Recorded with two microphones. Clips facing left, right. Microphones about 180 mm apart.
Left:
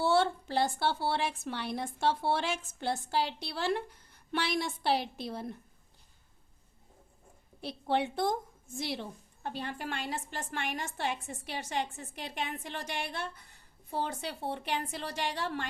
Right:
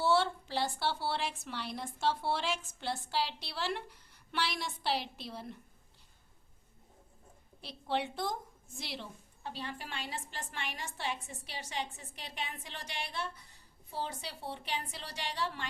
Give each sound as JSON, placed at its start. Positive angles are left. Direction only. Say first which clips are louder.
{"t": 0.0, "sound": "a woman's voice", "louder": "left 2 dB", "side_deg": 50}
{"t": 7.6, "sound": "a woman's voice", "louder": "left 5 dB", "side_deg": 55}